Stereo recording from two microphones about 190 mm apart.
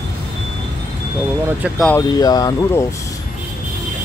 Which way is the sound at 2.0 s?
20° left (ahead or behind).